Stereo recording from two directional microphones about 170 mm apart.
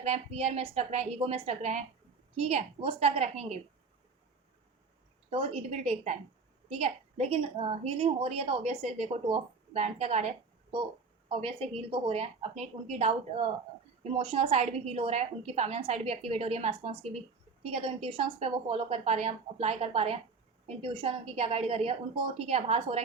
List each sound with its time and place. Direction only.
0.0 s a woman's voice: 35° right (ahead or behind)
5.3 s a woman's voice: 35° right (ahead or behind)